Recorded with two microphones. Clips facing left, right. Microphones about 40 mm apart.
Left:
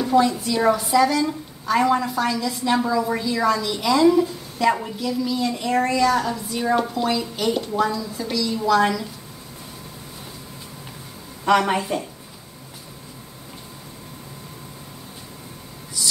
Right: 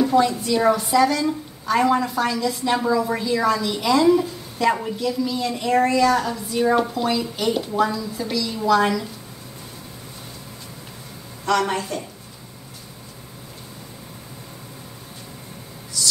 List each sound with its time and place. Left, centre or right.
0.0 s a woman's voice: centre
11.4 s speech: centre
16.0 s a sound: centre